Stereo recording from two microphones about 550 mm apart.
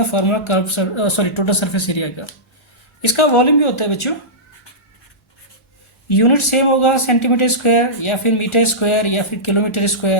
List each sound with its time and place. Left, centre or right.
0.1 s speech: left
6.1 s speech: left